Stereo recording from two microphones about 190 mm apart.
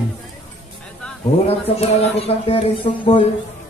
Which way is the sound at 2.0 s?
30° left (ahead or behind).